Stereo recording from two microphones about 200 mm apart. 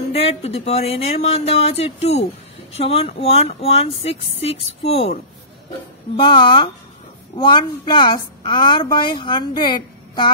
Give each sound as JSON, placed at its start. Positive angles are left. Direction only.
{"t": 0.1, "sound": "a woman's voice", "side_deg": 30}